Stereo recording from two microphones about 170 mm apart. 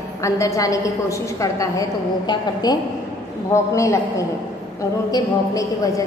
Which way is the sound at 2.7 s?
25° left (ahead or behind).